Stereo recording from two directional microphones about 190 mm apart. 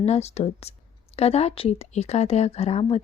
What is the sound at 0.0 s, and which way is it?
Speech, 35° left (ahead or behind).